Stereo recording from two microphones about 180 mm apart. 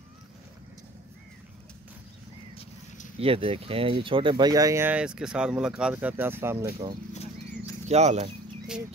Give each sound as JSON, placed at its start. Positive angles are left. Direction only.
{"t": 3.2, "sound": "speech", "side_deg": -30}
{"t": 7.9, "sound": "speech", "side_deg": -40}